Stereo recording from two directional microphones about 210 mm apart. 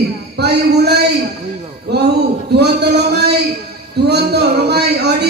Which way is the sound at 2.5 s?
50° right (ahead or behind).